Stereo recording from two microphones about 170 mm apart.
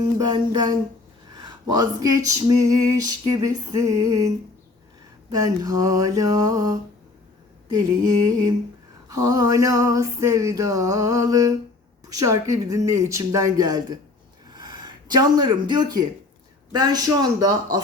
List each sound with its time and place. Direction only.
0.3 s female singing: 25° right (ahead or behind)
5.3 s female singing: 20° right (ahead or behind)
14.5 s speech: 25° right (ahead or behind)
16.7 s female singing: 25° right (ahead or behind)